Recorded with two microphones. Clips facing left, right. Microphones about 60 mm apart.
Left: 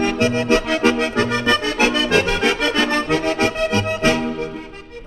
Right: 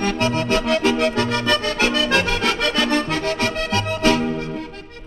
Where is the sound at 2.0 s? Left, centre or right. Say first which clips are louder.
Left 2 dB; left.